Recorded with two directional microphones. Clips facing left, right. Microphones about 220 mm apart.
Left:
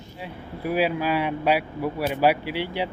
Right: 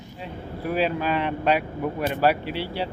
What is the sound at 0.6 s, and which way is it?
Speech, 10° left (ahead or behind).